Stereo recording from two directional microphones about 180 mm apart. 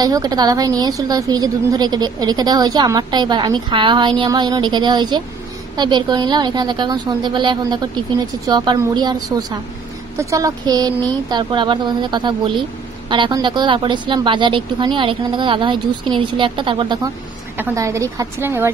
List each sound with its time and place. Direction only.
0.0 s a woman's voice: 20° right (ahead or behind)
17.6 s a woman's voice: 15° right (ahead or behind)